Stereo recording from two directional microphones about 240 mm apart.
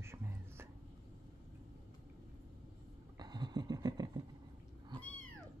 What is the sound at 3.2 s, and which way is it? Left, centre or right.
Vehicle, centre.